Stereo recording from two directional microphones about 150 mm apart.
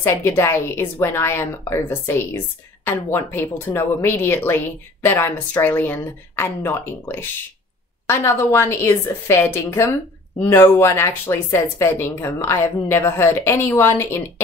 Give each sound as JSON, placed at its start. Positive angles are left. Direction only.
{"t": 0.0, "sound": "a woman's voice", "side_deg": 15}